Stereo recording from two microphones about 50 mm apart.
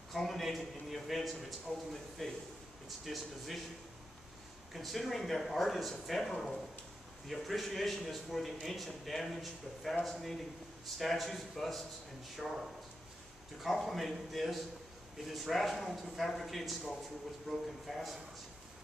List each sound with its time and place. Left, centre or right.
0.1 s speech: centre
1.7 s speech: centre
4.7 s speech: centre